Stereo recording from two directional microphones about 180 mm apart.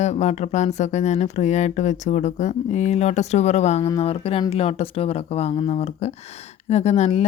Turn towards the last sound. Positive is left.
turn(degrees=35)  # may be behind; listen again after turning